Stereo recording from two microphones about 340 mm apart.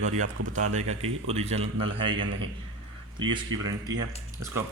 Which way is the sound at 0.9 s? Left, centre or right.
Centre.